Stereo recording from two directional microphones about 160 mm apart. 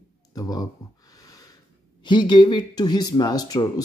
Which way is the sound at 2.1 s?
30° left (ahead or behind).